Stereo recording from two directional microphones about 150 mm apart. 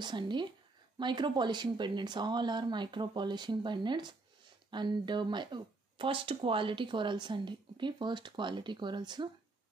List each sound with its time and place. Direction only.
0.0 s speech: 30° right (ahead or behind)